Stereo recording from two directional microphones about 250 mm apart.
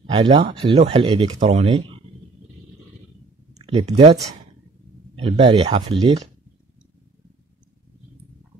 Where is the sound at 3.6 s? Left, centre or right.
Right.